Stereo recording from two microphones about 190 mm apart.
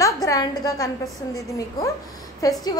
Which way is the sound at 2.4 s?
20° left (ahead or behind).